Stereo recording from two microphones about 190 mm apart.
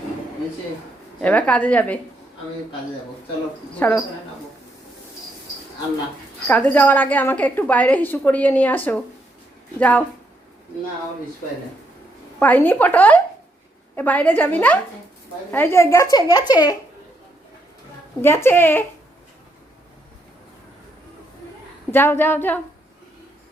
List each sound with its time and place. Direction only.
1.2 s a woman's voice: 5° left (ahead or behind)
3.8 s a woman's voice: 10° left (ahead or behind)
6.5 s a woman's voice: 10° left (ahead or behind)
12.4 s a woman's voice: 10° left (ahead or behind)
18.2 s a woman's voice: 10° left (ahead or behind)
21.9 s a woman's voice: 10° left (ahead or behind)